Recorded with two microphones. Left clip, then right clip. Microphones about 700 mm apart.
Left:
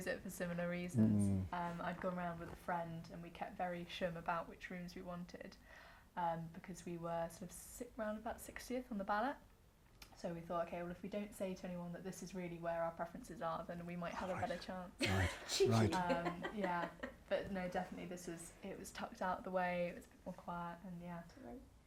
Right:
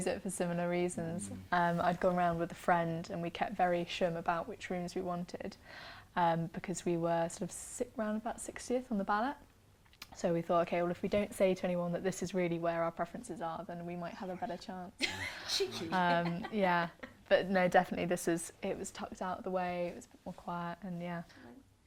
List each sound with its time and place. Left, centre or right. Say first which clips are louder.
0.0 s speech: right 8 dB; right
1.5 s speech: right 13 dB; right
16.0 s speech: right 8 dB; right